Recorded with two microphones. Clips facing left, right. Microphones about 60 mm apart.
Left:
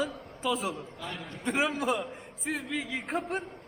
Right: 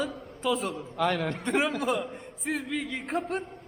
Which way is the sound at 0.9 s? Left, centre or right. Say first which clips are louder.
Right 13 dB; right.